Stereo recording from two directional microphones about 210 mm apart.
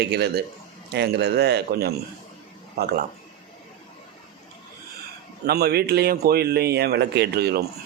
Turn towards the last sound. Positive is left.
turn(degrees=-50)  # may be behind; listen again after turning